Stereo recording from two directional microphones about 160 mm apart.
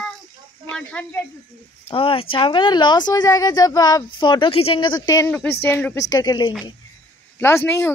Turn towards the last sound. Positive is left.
turn(degrees=15)  # may be behind; listen again after turning